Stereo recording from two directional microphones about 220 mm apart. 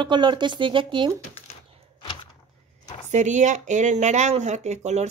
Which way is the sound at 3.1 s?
30° right (ahead or behind).